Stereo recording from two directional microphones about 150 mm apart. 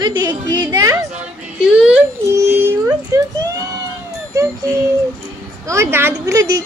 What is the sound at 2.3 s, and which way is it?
Speech, 15° right (ahead or behind).